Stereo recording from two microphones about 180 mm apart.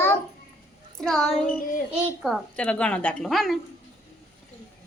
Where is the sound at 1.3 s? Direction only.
50° left (ahead or behind).